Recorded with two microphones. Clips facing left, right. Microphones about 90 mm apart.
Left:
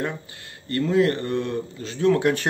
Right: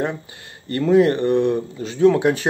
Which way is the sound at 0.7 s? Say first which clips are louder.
Right 5 dB; 20° right (ahead or behind).